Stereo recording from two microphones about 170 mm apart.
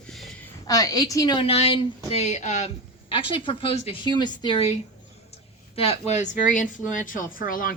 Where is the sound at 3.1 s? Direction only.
30° left (ahead or behind).